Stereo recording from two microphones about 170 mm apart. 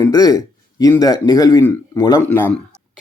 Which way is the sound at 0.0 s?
20° left (ahead or behind).